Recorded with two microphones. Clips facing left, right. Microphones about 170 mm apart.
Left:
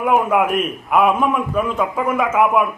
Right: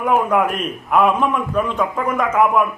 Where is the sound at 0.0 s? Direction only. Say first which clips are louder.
Left 1 dB; 5° left (ahead or behind).